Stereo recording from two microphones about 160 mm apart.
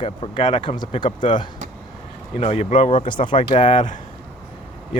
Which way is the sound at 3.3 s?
50° left (ahead or behind).